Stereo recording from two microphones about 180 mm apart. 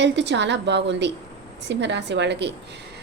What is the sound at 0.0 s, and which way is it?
A woman's voice, 75° right (ahead or behind).